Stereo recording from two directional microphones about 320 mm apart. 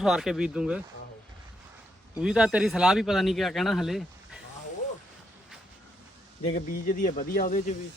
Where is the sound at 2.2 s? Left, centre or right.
Centre.